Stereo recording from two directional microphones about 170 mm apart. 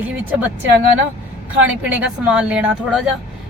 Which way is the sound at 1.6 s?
10° right (ahead or behind).